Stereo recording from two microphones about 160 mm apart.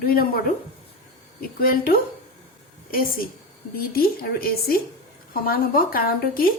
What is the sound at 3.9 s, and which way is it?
A woman's voice, 70° left (ahead or behind).